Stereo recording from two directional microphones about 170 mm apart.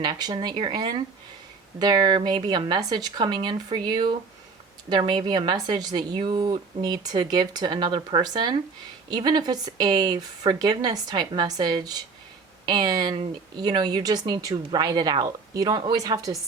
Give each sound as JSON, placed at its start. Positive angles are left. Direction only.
{"t": 0.0, "sound": "speech", "side_deg": -25}